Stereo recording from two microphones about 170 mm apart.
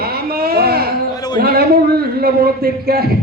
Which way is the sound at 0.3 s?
65° right (ahead or behind).